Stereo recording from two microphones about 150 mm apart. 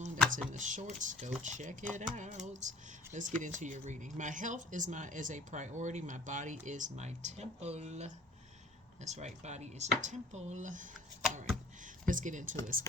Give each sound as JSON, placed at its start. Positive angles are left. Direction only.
{"t": 0.3, "sound": "speech", "side_deg": -55}
{"t": 12.0, "sound": "speech", "side_deg": -60}